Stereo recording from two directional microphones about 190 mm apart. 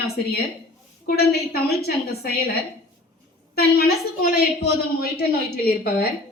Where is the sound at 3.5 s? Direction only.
55° left (ahead or behind).